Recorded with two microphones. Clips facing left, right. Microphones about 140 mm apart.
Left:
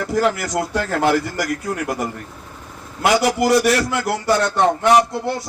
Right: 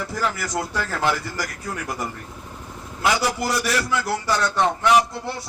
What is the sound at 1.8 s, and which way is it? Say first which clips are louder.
A man's voice: left 6 dB; 75° left (ahead or behind).